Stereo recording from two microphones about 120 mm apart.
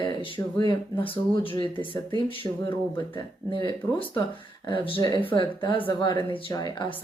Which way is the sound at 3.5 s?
40° left (ahead or behind).